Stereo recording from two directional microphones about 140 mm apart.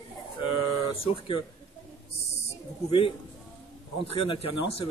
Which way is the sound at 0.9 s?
40° left (ahead or behind).